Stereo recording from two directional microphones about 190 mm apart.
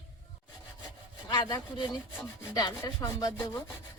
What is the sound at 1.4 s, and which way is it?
Wood, 25° left (ahead or behind).